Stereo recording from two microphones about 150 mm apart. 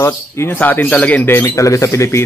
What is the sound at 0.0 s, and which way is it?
Speech, 15° left (ahead or behind).